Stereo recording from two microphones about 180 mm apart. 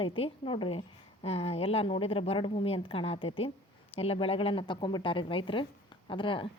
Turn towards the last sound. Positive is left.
turn(degrees=30)  # may be behind; listen again after turning